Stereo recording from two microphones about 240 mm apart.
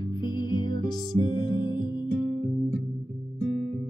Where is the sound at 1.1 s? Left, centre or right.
Centre.